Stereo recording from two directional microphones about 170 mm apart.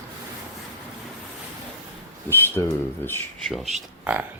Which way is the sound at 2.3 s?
15° left (ahead or behind).